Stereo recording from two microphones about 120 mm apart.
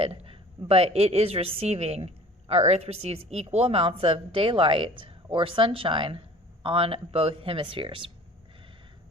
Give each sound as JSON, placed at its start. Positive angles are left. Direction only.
{"t": 0.0, "sound": "a woman's voice", "side_deg": -55}